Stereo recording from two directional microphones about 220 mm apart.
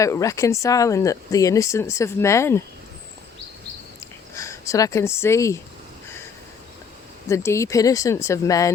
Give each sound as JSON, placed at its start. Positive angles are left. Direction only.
{"t": 0.0, "sound": "speech", "side_deg": 15}
{"t": 4.4, "sound": "speech", "side_deg": 15}
{"t": 7.3, "sound": "speech", "side_deg": 15}